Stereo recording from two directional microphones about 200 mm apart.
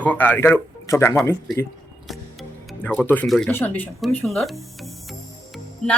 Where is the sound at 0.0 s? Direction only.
10° left (ahead or behind).